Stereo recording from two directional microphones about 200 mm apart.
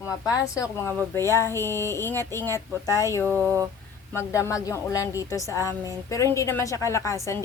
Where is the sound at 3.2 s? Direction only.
15° right (ahead or behind).